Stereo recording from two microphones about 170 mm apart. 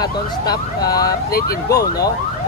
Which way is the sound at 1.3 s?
60° left (ahead or behind).